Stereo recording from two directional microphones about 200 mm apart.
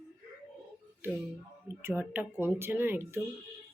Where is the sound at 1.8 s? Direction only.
10° right (ahead or behind).